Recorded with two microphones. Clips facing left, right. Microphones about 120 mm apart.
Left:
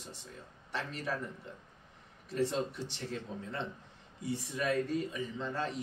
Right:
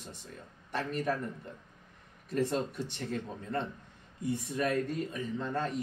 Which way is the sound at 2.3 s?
55° right (ahead or behind).